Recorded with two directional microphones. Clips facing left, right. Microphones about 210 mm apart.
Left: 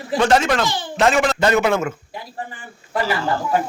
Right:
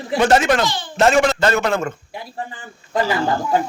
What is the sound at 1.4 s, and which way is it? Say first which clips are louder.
Speech: left 1 dB; 15° left (ahead or behind).